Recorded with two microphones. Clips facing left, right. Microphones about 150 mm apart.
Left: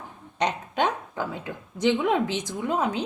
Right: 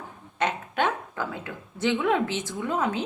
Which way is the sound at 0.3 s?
20° left (ahead or behind).